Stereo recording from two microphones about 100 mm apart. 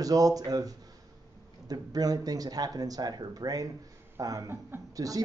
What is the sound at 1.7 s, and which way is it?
Speech, 40° right (ahead or behind).